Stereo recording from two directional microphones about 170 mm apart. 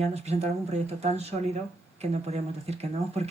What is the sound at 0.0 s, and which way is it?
Speech, 40° right (ahead or behind).